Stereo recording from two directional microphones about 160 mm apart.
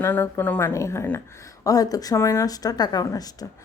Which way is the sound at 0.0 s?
15° left (ahead or behind).